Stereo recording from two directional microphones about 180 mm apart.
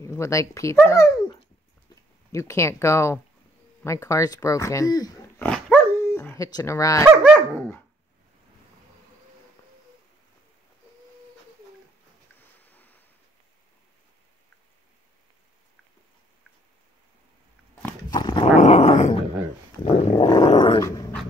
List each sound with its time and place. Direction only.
0.0 s speech: 15° left (ahead or behind)
5.4 s dog: 10° left (ahead or behind)
7.1 s dog: 5° right (ahead or behind)
12.6 s waves: 10° left (ahead or behind)
18.1 s dog: 25° left (ahead or behind)
18.6 s dog: 35° left (ahead or behind)
19.8 s dog: 25° left (ahead or behind)